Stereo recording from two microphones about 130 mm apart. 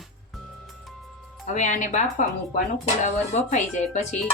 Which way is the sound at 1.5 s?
70° left (ahead or behind).